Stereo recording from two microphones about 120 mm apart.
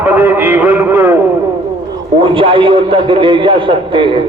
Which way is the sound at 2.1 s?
45° right (ahead or behind).